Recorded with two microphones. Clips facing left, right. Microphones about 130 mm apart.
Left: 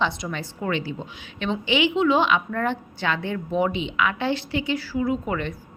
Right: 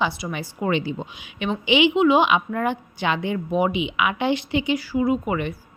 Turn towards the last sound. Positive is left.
turn(degrees=-10)  # may be behind; listen again after turning